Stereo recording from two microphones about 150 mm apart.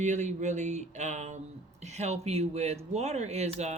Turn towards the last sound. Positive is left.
turn(degrees=-45)  # may be behind; listen again after turning